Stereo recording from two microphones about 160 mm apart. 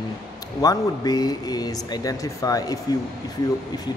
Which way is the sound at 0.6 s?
25° left (ahead or behind).